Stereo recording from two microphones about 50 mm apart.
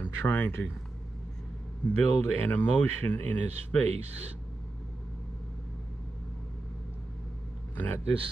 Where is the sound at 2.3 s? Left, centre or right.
Left.